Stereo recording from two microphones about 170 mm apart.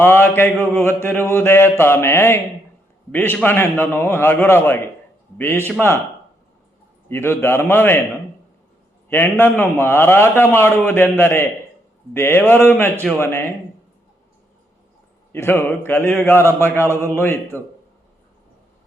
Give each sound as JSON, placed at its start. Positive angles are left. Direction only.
{"t": 0.0, "sound": "a man's voice", "side_deg": 15}
{"t": 5.5, "sound": "a man's voice", "side_deg": -15}
{"t": 7.1, "sound": "a man's voice", "side_deg": 15}
{"t": 9.0, "sound": "a man's voice", "side_deg": 15}
{"t": 15.3, "sound": "a man's voice", "side_deg": 15}
{"t": 17.5, "sound": "a man's voice", "side_deg": -15}